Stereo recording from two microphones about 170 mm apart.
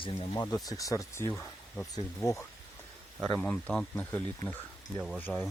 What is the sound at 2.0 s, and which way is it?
Speech, 20° left (ahead or behind).